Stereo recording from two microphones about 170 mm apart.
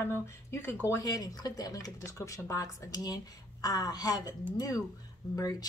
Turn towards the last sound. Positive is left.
turn(degrees=20)  # may be behind; listen again after turning